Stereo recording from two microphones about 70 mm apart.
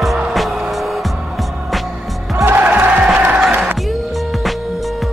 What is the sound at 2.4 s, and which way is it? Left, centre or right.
Music, right.